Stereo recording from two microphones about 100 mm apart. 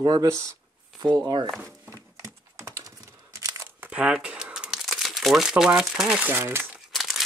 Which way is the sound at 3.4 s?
35° right (ahead or behind).